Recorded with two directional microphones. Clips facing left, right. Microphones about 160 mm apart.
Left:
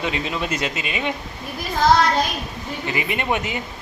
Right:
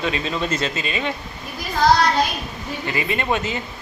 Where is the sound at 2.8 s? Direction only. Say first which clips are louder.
Right 1 dB; 20° left (ahead or behind).